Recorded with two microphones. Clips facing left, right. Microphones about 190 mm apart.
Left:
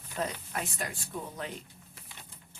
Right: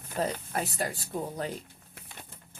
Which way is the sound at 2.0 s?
50° right (ahead or behind).